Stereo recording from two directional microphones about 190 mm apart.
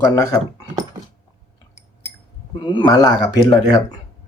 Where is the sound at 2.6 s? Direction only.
25° left (ahead or behind).